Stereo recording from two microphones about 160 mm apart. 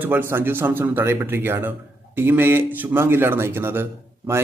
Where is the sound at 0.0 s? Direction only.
10° right (ahead or behind).